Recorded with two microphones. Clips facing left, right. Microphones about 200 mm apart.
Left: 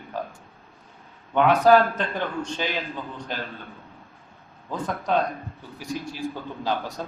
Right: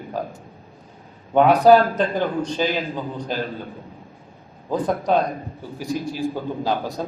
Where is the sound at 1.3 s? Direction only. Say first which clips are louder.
Right 4 dB; 40° right (ahead or behind).